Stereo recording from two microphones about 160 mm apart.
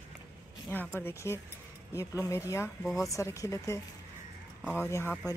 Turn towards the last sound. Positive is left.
turn(degrees=15)  # may be behind; listen again after turning